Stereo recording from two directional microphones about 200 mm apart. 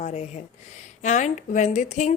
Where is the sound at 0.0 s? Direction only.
35° left (ahead or behind).